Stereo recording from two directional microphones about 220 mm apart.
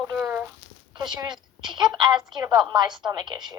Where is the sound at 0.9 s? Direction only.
20° right (ahead or behind).